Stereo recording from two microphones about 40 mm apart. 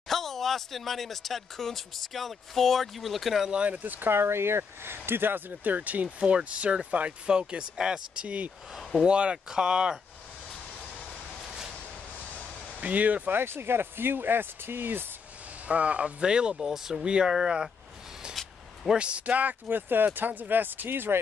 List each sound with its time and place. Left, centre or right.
0.1 s speech: centre
3.6 s speech: right
4.1 s speech: right
6.1 s speech: right
8.2 s speech: right; by 9.9 s centre
12.8 s speech: right
13.4 s speech: right
15.7 s speech: right
16.5 s speech: centre
17.0 s speech: right
18.9 s speech: right
19.7 s speech: right